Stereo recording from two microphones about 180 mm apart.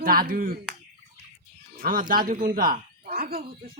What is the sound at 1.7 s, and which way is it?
Speech, 50° right (ahead or behind).